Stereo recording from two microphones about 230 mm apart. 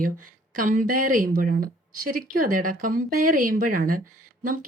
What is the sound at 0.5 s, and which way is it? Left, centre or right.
Speech, right.